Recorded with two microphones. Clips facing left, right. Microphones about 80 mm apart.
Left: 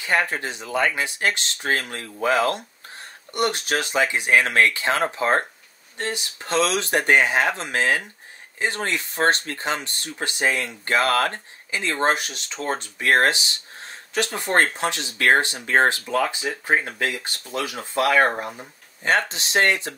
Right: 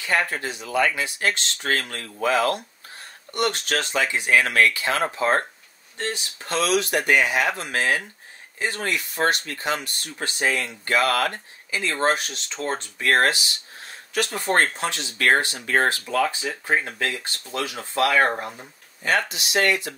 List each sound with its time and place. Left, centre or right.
0.0 s speech: left
6.4 s speech: left
19.0 s speech: left